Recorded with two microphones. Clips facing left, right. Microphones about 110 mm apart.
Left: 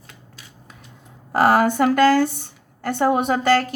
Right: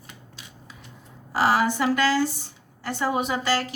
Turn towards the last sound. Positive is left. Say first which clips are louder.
# left 7 dB
turn(degrees=50)  # may be behind; listen again after turning